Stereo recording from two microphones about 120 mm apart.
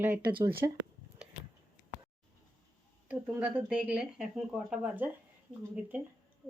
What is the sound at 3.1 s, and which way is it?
Speech, 10° right (ahead or behind).